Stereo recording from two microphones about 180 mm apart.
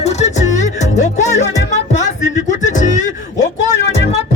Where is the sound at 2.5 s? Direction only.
45° left (ahead or behind).